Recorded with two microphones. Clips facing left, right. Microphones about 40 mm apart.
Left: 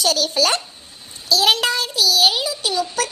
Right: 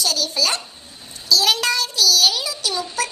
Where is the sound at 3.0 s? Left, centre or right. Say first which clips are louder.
Left 1 dB; left.